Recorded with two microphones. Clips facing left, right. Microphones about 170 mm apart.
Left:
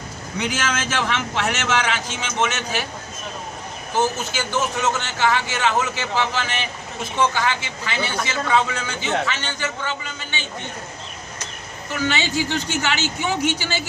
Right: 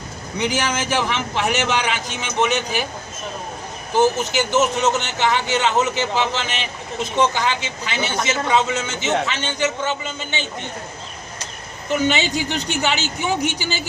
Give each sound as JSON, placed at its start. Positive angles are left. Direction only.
{"t": 0.3, "sound": "speech", "side_deg": -15}
{"t": 4.2, "sound": "speech", "side_deg": -20}
{"t": 11.9, "sound": "speech", "side_deg": -20}